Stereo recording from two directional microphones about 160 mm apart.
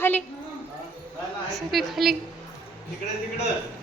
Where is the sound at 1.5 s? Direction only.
Centre (ahead or behind).